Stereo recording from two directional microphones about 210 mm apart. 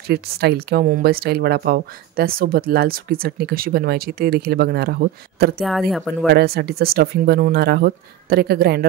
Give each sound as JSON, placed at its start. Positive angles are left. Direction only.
{"t": 0.0, "sound": "speech", "side_deg": -50}
{"t": 5.6, "sound": "speech", "side_deg": 0}
{"t": 6.3, "sound": "speech", "side_deg": -50}